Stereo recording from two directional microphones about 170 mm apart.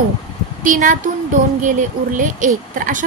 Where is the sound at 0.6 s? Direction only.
50° right (ahead or behind).